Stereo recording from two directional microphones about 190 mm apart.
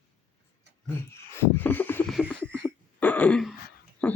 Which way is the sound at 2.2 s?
5° right (ahead or behind).